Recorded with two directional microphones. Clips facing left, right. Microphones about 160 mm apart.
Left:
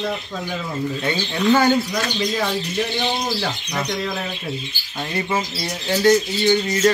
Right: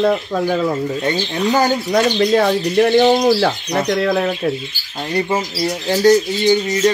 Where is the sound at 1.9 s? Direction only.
60° right (ahead or behind).